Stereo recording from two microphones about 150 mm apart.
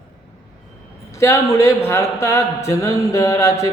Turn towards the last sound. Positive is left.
turn(degrees=20)  # may be behind; listen again after turning